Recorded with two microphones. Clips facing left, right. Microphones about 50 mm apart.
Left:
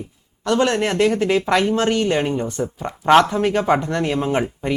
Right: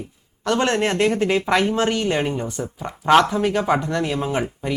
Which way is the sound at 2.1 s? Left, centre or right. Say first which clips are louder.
Left 2 dB; centre.